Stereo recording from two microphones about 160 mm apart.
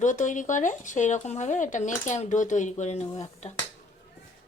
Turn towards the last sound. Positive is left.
turn(degrees=45)  # may be behind; listen again after turning